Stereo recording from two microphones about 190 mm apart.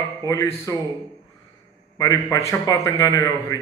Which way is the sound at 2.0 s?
20° left (ahead or behind).